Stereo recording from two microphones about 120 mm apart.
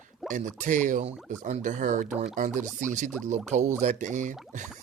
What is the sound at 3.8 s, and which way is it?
Speech, 90° right.